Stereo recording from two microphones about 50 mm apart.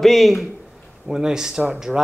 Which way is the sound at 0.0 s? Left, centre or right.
Centre.